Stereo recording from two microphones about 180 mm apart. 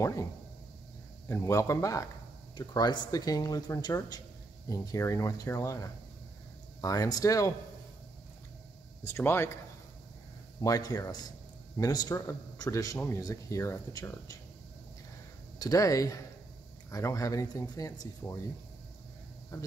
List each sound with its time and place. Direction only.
0.0 s a man's voice: 15° left (ahead or behind)
1.3 s a man's voice: 15° left (ahead or behind)
9.0 s a man's voice: 15° left (ahead or behind)
10.6 s a man's voice: 20° left (ahead or behind)
15.6 s a man's voice: 20° left (ahead or behind)
19.5 s a man's voice: 20° left (ahead or behind)